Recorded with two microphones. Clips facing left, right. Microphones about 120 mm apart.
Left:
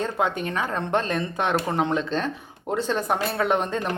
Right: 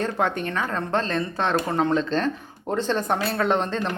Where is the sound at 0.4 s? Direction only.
15° left (ahead or behind).